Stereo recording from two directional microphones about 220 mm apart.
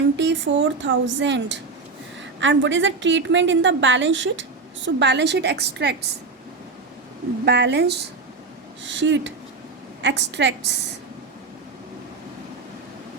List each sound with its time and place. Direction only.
0.2 s a woman's voice: 55° right (ahead or behind)
7.4 s a woman's voice: 50° right (ahead or behind)